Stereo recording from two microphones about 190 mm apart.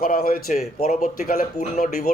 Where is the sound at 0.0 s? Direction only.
50° left (ahead or behind).